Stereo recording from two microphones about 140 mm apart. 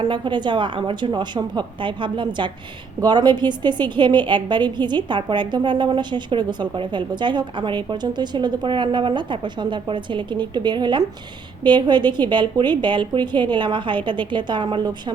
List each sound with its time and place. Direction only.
0.0 s a woman's voice: 35° right (ahead or behind)